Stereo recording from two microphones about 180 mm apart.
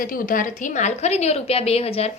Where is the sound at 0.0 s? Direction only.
50° left (ahead or behind).